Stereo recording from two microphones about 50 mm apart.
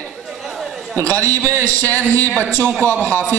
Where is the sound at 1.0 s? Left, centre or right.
Left.